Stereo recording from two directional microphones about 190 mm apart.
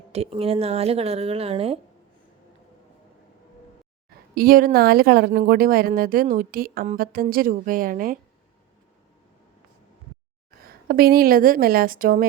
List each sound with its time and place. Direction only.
0.1 s speech: 30° right (ahead or behind)
4.4 s speech: 50° right (ahead or behind)
10.6 s speech: 50° right (ahead or behind)